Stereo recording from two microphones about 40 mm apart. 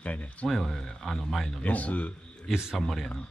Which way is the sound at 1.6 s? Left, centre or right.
Left.